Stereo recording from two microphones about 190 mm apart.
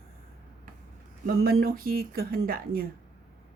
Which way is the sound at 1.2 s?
55° right (ahead or behind).